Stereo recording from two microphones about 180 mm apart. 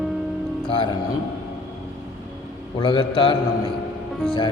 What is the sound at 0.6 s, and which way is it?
Speech, 25° left (ahead or behind).